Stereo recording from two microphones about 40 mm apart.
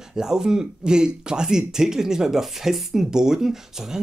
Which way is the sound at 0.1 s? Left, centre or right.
Centre.